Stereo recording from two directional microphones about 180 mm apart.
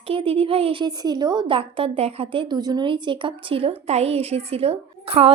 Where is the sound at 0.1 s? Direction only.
30° right (ahead or behind).